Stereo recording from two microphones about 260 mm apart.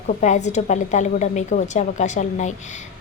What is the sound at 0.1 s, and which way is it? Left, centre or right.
A woman's voice, left.